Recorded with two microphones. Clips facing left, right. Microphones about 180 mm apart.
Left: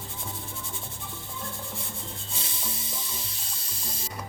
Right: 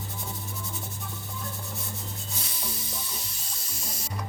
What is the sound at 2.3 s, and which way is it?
Rub, 25° left (ahead or behind).